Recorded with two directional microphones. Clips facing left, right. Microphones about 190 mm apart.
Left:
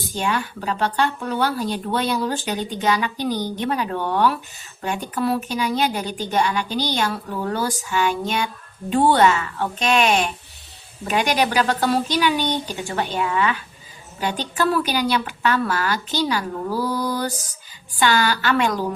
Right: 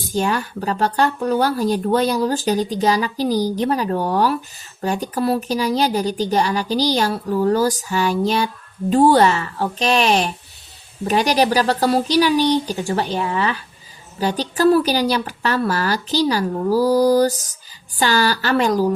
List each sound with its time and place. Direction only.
0.1 s speech: 40° right (ahead or behind)